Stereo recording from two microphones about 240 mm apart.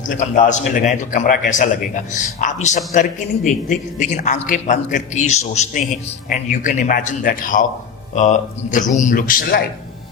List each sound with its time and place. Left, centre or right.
0.1 s a man's voice: left